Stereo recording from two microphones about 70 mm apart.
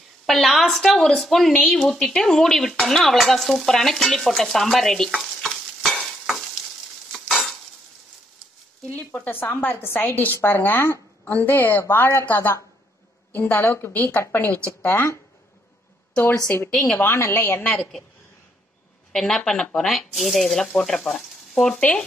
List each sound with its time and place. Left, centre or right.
0.3 s speech: centre
7.1 s stir: centre
9.2 s a woman's voice: left
16.7 s a woman's voice: centre
17.0 s a woman's voice: left
19.1 s speech: centre